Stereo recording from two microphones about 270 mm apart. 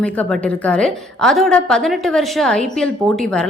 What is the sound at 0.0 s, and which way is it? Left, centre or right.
A woman's voice, centre.